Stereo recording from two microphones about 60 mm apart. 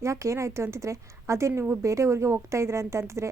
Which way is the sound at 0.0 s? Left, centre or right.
Right.